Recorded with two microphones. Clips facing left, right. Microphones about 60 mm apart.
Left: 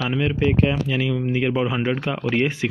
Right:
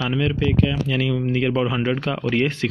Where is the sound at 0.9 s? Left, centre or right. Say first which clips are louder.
Right 1 dB; centre.